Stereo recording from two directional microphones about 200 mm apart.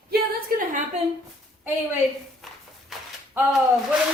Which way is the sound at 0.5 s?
45° right (ahead or behind).